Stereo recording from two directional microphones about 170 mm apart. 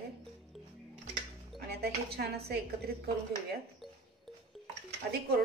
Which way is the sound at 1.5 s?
70° right (ahead or behind).